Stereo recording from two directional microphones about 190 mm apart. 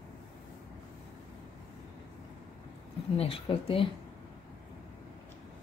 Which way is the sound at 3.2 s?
30° left (ahead or behind).